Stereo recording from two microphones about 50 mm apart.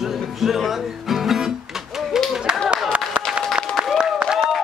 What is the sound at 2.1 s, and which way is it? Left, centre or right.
Clapping, centre.